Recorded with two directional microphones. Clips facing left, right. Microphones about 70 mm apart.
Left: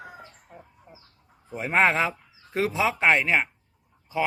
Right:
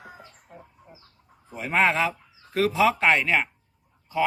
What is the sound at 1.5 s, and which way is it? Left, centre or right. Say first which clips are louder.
A man's voice: left 1 dB; left.